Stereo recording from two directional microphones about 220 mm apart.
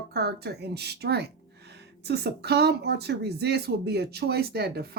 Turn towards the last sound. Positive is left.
turn(degrees=-45)  # may be behind; listen again after turning